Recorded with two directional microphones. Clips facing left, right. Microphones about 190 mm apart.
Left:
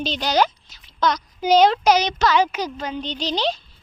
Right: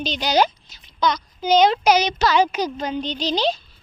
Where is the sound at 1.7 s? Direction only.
20° right (ahead or behind).